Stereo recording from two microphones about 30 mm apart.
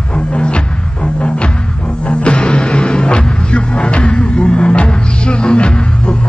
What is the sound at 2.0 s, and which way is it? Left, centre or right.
Music, left.